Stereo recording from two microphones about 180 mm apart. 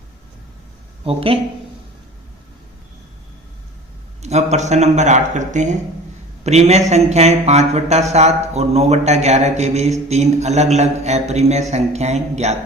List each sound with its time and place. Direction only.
1.0 s speech: 30° right (ahead or behind)
4.2 s speech: 40° right (ahead or behind)